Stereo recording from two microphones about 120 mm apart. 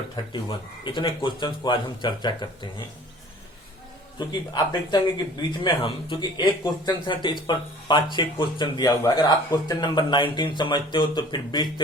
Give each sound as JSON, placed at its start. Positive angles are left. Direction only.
{"t": 0.9, "sound": "speech", "side_deg": 45}
{"t": 4.2, "sound": "speech", "side_deg": 35}